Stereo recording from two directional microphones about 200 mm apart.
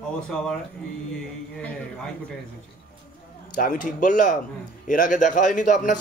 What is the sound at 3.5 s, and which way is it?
A man's voice, 40° left (ahead or behind).